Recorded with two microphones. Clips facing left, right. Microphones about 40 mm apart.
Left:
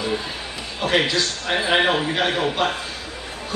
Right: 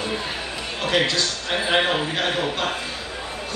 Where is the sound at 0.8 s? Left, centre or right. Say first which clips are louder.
Left 2 dB; centre.